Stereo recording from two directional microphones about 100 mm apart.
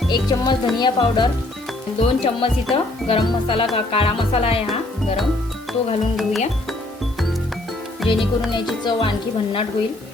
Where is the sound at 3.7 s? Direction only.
70° left (ahead or behind).